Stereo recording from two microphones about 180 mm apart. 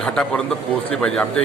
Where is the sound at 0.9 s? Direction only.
5° left (ahead or behind).